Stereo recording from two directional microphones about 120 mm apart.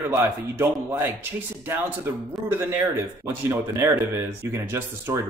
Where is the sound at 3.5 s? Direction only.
20° right (ahead or behind).